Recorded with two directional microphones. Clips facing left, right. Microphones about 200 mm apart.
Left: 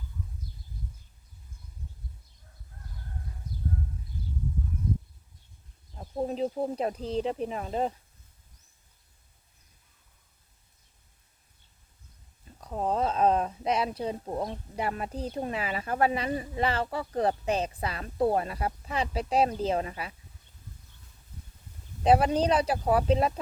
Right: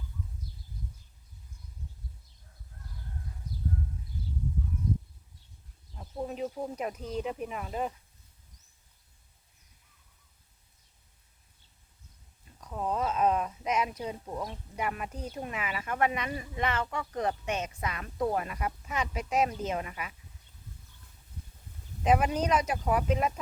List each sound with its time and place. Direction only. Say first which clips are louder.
6.0 s speech: left 5 dB; 35° left (ahead or behind)
12.5 s a sound: left 3 dB; 35° left (ahead or behind)
14.8 s speech: left 3 dB; 35° left (ahead or behind)
22.0 s speech: left 4 dB; 35° left (ahead or behind)